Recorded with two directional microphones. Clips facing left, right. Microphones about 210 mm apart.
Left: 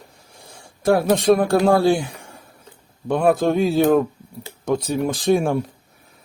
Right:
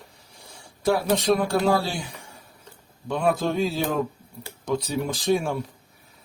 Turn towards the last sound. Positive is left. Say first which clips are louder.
# left 5 dB
turn(degrees=50)  # may be behind; listen again after turning